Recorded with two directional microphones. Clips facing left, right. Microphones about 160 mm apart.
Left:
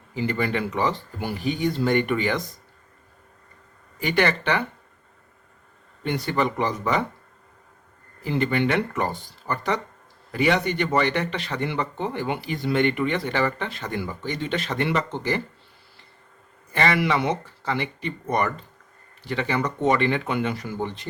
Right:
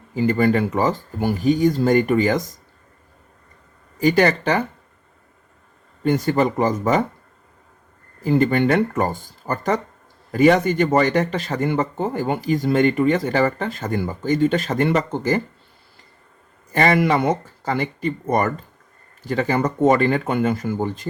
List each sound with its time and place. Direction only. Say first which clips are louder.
0.1 s speech: right 7 dB; 45° right (ahead or behind)
4.0 s speech: right 6 dB; 40° right (ahead or behind)
6.0 s speech: right 6 dB; 45° right (ahead or behind)
8.2 s speech: right 6 dB; 45° right (ahead or behind)
16.7 s speech: right 5 dB; 45° right (ahead or behind)